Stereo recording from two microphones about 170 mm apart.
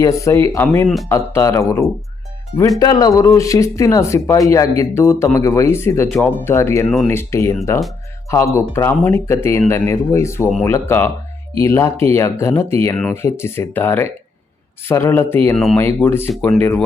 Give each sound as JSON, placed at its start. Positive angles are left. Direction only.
{"t": 0.0, "sound": "speech", "side_deg": 20}
{"t": 6.1, "sound": "speech", "side_deg": 0}
{"t": 6.4, "sound": "speech", "side_deg": 15}
{"t": 15.5, "sound": "speech", "side_deg": 0}
{"t": 16.0, "sound": "speech", "side_deg": 15}